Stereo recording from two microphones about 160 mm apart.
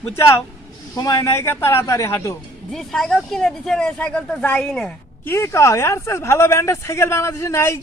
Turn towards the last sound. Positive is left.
turn(degrees=15)  # may be behind; listen again after turning